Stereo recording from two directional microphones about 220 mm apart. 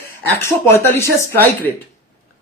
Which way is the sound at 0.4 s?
10° left (ahead or behind).